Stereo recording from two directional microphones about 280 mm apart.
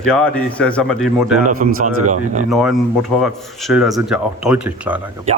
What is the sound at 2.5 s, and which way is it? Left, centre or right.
Speech, centre.